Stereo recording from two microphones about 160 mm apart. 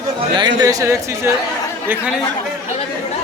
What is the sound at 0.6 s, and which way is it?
Speech, 20° right (ahead or behind).